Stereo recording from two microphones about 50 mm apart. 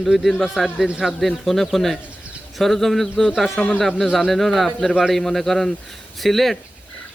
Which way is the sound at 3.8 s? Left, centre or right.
Centre.